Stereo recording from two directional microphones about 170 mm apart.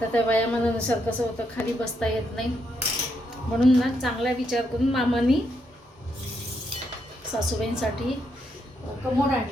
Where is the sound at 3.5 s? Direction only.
Centre (ahead or behind).